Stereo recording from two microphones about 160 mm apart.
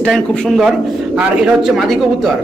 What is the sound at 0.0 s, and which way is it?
A man's voice, centre (ahead or behind).